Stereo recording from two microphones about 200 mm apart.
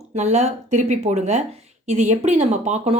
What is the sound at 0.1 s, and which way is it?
Speech, 35° right (ahead or behind).